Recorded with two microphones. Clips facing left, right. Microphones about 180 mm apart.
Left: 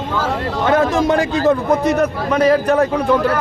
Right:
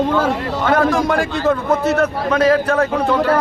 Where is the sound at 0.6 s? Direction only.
20° left (ahead or behind).